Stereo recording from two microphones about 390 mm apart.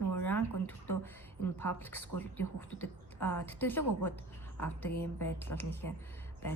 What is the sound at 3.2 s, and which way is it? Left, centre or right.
Speech, centre.